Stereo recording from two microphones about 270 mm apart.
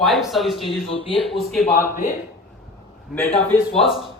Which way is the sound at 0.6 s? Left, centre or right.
Centre.